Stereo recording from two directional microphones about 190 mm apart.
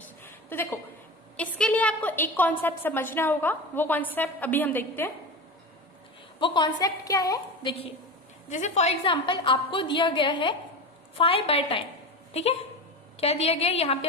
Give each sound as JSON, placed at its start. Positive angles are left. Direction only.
{"t": 0.0, "sound": "a sound", "side_deg": 10}
{"t": 2.6, "sound": "a woman's voice", "side_deg": 10}
{"t": 6.4, "sound": "a woman's voice", "side_deg": 20}
{"t": 8.5, "sound": "a woman's voice", "side_deg": 40}